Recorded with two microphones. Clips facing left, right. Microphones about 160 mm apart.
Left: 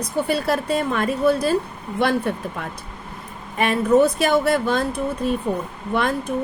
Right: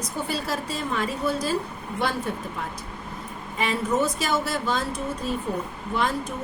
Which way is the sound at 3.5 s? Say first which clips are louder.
Left 8 dB; 60° left (ahead or behind).